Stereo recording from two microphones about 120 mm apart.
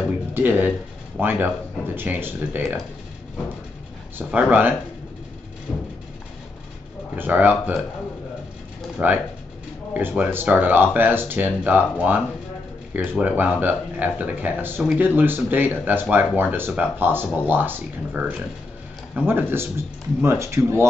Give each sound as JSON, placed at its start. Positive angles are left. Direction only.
{"t": 0.1, "sound": "speech", "side_deg": -15}
{"t": 4.2, "sound": "speech", "side_deg": -10}
{"t": 5.7, "sound": "a sound", "side_deg": 5}
{"t": 7.2, "sound": "speech", "side_deg": -15}
{"t": 9.0, "sound": "speech", "side_deg": -15}